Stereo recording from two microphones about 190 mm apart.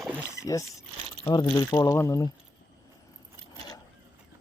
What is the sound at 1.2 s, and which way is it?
Speech, 20° left (ahead or behind).